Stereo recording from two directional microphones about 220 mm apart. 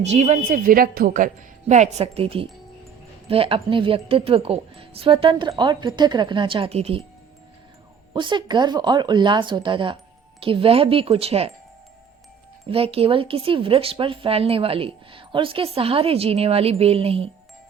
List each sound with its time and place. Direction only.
0.0 s a woman's voice: 30° right (ahead or behind)
8.1 s speech: 20° right (ahead or behind)
12.6 s speech: 25° right (ahead or behind)